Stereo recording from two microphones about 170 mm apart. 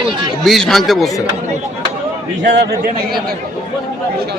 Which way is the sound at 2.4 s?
80° right.